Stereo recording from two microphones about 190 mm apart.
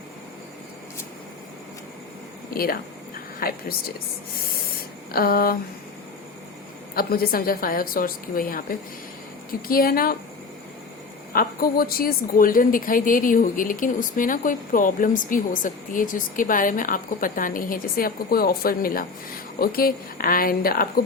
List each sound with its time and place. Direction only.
2.5 s speech: 50° left (ahead or behind)
5.1 s speech: 50° left (ahead or behind)
6.9 s speech: 50° left (ahead or behind)
11.3 s speech: 50° left (ahead or behind)